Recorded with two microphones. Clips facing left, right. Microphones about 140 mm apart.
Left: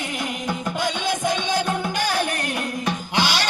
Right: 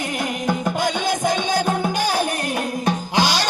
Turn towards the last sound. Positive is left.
turn(degrees=-40)  # may be behind; listen again after turning